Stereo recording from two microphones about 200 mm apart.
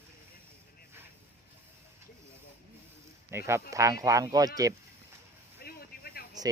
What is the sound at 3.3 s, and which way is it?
Speech, 15° right (ahead or behind).